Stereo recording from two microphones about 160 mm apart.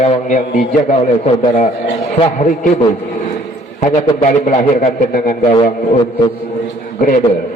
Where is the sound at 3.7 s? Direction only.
45° left (ahead or behind).